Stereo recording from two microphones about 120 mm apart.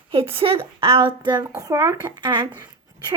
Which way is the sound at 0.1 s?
55° right (ahead or behind).